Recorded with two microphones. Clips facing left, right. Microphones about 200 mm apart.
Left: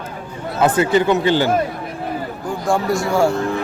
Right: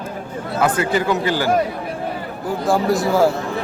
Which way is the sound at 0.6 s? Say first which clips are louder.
Left 3 dB; 25° left (ahead or behind).